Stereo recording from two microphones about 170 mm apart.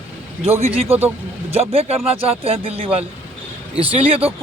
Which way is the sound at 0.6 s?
35° right (ahead or behind).